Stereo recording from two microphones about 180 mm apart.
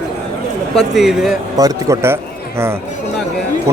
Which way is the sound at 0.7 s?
Centre (ahead or behind).